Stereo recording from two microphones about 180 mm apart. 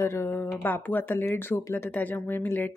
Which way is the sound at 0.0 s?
15° left (ahead or behind).